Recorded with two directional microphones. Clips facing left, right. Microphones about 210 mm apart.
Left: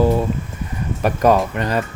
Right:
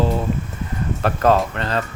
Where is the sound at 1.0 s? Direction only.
15° left (ahead or behind).